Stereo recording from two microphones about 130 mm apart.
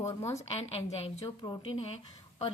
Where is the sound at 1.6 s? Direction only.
50° left (ahead or behind).